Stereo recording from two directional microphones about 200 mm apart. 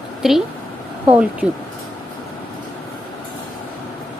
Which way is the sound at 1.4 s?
5° right (ahead or behind).